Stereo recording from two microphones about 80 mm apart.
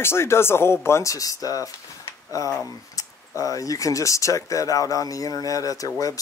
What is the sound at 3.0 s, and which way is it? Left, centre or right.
Speech, left.